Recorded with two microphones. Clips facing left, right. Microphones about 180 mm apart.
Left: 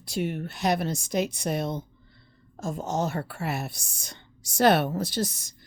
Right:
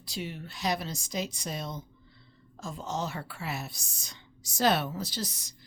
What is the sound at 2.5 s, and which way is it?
A woman's voice, 45° left (ahead or behind).